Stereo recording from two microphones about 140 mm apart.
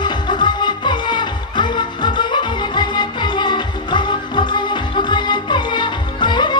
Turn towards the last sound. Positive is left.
turn(degrees=35)  # may be behind; listen again after turning